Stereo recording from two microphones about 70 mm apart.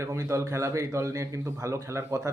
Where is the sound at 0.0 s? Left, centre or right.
Right.